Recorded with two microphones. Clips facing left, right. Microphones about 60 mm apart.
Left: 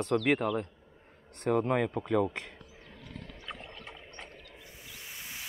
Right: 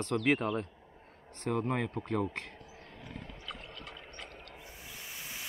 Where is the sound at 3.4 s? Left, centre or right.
Left.